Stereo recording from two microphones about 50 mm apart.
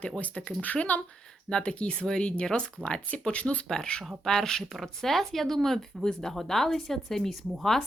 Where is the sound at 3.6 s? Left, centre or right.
Centre.